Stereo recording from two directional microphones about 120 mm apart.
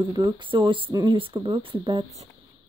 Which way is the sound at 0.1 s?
40° right (ahead or behind).